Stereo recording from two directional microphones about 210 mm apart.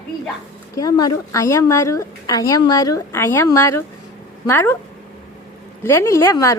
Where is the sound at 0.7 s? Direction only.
15° left (ahead or behind).